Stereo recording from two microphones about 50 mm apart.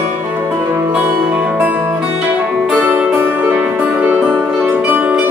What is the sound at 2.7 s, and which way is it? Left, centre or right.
Music, right.